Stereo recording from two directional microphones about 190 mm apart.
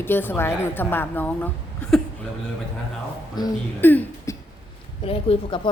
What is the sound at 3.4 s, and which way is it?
Speech, 10° left (ahead or behind).